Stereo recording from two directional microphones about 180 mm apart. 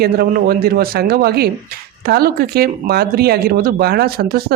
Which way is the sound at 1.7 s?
55° right (ahead or behind).